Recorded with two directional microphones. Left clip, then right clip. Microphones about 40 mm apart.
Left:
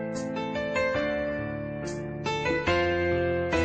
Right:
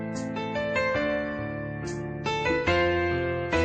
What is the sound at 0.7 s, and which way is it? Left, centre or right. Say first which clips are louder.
Music: right 1 dB; right.